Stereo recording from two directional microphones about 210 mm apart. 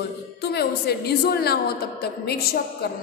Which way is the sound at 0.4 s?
50° left (ahead or behind).